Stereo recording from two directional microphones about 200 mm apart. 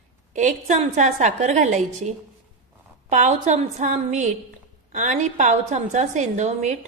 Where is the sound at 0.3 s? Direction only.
35° right (ahead or behind).